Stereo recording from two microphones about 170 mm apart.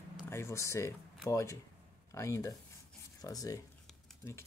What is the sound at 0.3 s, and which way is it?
Speech, 15° left (ahead or behind).